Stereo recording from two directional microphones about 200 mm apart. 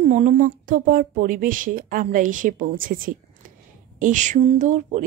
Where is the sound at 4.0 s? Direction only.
40° right (ahead or behind).